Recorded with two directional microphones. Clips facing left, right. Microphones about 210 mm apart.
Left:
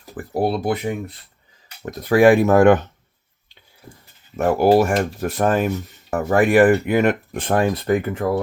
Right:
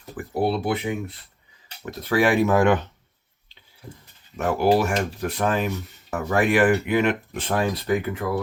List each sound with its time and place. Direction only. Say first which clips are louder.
0.4 s speech: left 2 dB; 40° left (ahead or behind)
4.4 s speech: left 5 dB; 45° left (ahead or behind)